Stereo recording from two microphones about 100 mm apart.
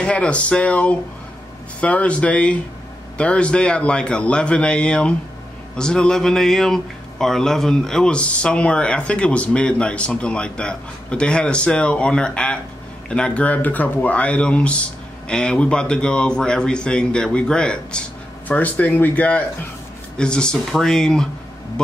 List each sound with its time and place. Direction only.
0.0 s a man's voice: 10° left (ahead or behind)